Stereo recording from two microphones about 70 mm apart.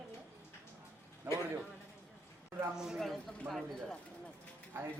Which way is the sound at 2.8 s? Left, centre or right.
Centre.